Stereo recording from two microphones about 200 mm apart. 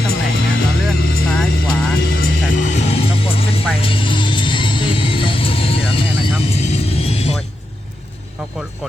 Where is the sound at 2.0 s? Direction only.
60° left (ahead or behind).